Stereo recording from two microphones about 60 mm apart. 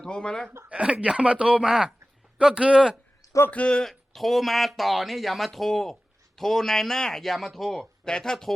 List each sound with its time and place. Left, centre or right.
0.0 s speech: centre
0.7 s speech: centre
3.5 s speech: centre
3.8 s speech: centre